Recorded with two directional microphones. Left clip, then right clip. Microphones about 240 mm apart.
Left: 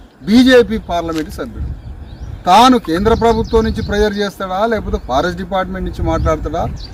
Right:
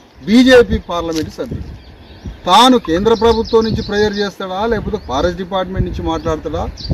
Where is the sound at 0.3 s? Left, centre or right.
Centre.